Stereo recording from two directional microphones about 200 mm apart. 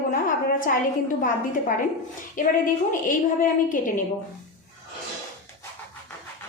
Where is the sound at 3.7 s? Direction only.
40° left (ahead or behind).